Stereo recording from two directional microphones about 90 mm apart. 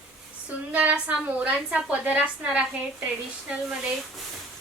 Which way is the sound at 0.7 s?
15° right (ahead or behind).